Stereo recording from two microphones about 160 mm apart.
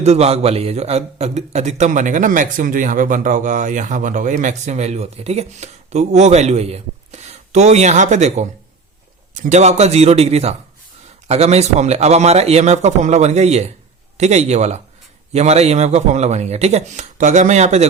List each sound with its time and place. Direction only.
0.0 s a man's voice: 40° right (ahead or behind)